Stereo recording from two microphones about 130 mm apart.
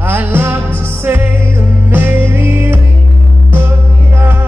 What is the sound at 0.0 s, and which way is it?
Music, 15° right (ahead or behind).